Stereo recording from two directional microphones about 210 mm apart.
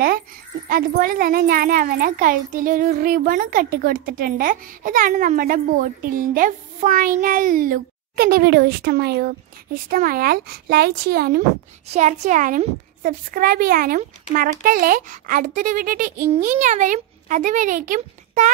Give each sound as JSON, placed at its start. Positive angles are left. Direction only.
{"t": 0.7, "sound": "a child's voice", "side_deg": -40}
{"t": 11.9, "sound": "a woman's voice", "side_deg": -35}